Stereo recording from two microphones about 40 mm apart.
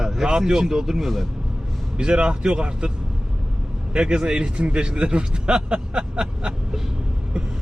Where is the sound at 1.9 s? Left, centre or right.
Right.